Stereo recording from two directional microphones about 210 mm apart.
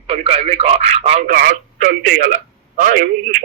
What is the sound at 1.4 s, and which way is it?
A man's voice, 45° right (ahead or behind).